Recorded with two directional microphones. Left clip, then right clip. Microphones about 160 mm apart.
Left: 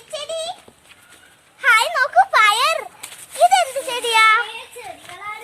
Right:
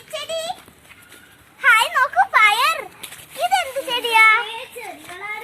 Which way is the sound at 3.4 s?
65° left (ahead or behind).